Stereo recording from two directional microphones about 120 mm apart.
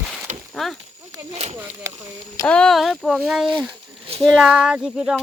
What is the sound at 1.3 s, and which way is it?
Speech, 60° right (ahead or behind).